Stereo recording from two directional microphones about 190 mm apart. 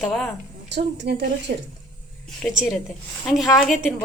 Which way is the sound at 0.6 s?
65° right (ahead or behind).